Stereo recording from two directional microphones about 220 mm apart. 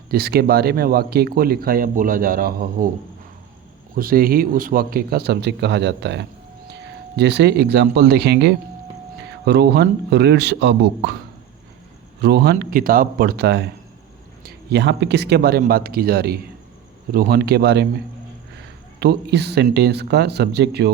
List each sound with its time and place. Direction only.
0.1 s speech: 45° right (ahead or behind)
3.9 s speech: 40° right (ahead or behind)
12.2 s speech: 50° right (ahead or behind)
18.9 s speech: 45° right (ahead or behind)